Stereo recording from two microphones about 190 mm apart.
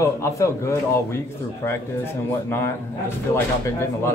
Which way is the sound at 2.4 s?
15° left (ahead or behind).